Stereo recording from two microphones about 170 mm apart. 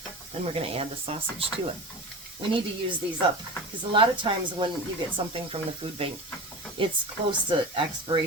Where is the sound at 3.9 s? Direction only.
30° right (ahead or behind).